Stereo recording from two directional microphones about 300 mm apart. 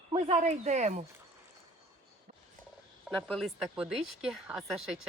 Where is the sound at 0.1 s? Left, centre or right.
Right.